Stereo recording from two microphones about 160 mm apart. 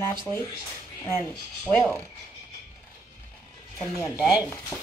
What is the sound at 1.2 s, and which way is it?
Speech, 10° left (ahead or behind).